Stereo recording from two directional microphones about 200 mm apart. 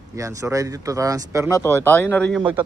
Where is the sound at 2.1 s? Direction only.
5° left (ahead or behind).